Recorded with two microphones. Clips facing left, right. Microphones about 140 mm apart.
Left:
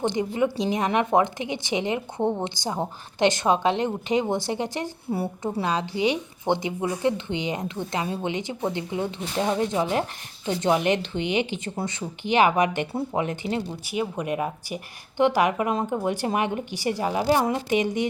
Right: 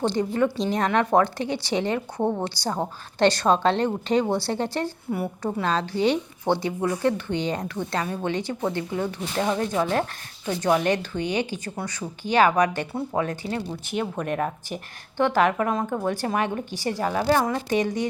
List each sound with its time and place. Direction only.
0.0 s speech: 15° left (ahead or behind)
5.1 s a woman's voice: 30° left (ahead or behind)
5.6 s speech: 15° left (ahead or behind)
13.9 s speech: 10° left (ahead or behind)
15.7 s speech: 25° left (ahead or behind)